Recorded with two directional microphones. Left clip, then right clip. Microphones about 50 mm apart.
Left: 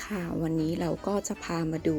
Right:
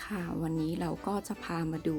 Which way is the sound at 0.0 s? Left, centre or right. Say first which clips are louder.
Left 4 dB; left.